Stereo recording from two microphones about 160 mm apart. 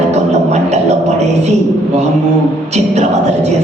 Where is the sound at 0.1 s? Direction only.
45° right (ahead or behind).